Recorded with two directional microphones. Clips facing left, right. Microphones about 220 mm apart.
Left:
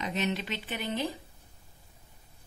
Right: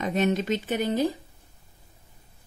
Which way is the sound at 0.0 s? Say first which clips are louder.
Right 7 dB; 50° right (ahead or behind).